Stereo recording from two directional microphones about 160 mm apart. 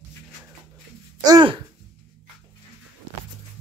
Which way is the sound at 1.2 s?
25° right (ahead or behind).